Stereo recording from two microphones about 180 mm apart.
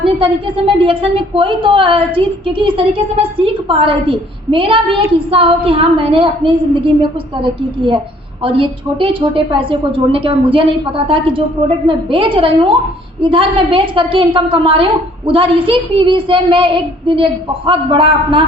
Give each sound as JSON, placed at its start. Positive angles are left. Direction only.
{"t": 0.0, "sound": "a woman's voice", "side_deg": -30}
{"t": 8.4, "sound": "a woman's voice", "side_deg": -30}